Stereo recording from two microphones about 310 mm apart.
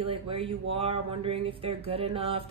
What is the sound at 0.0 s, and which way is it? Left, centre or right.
Speech, centre.